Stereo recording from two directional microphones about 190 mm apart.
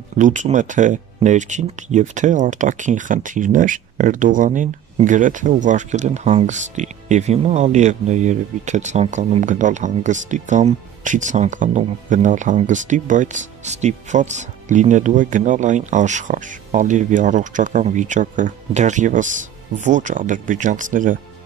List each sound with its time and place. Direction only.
0.2 s speech: 40° right (ahead or behind)